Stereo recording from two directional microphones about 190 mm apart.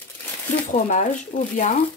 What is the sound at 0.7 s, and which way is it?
Speech, 40° left (ahead or behind).